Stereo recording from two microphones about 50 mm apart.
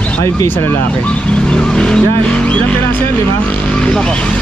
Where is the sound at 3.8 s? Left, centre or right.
Centre.